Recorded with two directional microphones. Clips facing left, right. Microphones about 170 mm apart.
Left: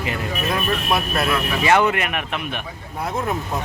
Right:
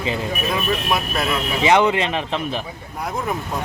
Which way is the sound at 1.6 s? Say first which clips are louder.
Right 2 dB; 20° right (ahead or behind).